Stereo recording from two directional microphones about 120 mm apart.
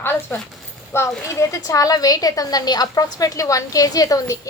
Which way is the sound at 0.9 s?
20° left (ahead or behind).